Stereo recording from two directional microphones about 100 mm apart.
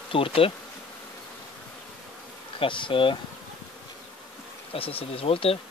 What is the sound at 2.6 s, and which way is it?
Speech, 55° left (ahead or behind).